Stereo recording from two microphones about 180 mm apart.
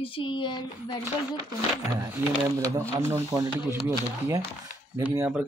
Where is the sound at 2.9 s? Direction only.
15° right (ahead or behind).